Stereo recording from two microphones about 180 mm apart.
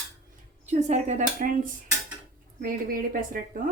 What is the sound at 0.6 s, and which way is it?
Speech, 40° right (ahead or behind).